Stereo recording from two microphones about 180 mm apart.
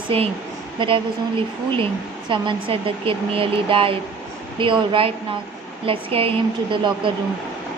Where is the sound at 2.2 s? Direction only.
25° right (ahead or behind).